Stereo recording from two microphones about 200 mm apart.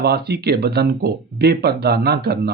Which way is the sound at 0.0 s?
55° right (ahead or behind).